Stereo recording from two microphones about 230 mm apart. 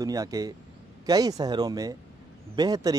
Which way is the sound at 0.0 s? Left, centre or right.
Centre.